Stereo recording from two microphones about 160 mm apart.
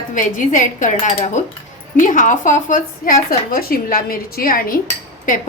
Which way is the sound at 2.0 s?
55° left (ahead or behind).